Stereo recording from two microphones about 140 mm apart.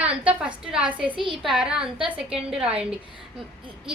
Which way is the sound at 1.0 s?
35° right (ahead or behind).